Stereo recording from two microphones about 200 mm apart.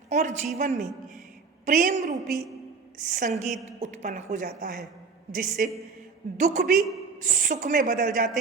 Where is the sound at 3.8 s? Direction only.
35° right (ahead or behind).